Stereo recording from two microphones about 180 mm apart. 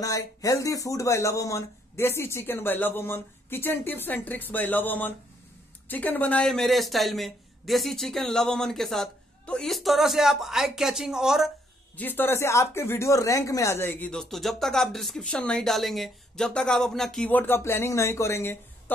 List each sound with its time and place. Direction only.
0.0 s speech: 20° left (ahead or behind); by 11.5 s centre (ahead or behind)
12.0 s speech: 10° left (ahead or behind)